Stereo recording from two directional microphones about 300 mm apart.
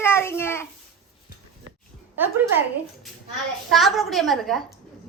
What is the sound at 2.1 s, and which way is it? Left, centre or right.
Speech, centre.